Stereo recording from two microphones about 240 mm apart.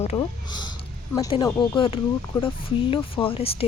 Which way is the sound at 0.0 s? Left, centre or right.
Left.